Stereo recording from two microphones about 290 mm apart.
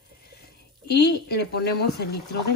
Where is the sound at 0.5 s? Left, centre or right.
Left.